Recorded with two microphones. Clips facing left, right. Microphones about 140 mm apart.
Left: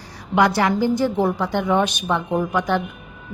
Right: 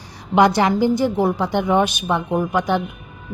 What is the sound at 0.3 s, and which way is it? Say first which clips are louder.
A woman's voice: right 3 dB; 20° right (ahead or behind).